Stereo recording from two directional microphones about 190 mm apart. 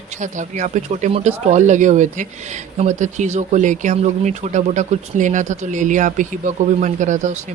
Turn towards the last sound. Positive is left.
turn(degrees=-40)  # may be behind; listen again after turning